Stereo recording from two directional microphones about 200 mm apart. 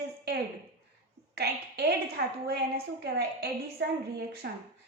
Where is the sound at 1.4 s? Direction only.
55° right (ahead or behind).